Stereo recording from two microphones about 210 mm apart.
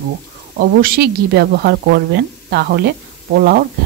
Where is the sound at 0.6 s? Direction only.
45° right (ahead or behind).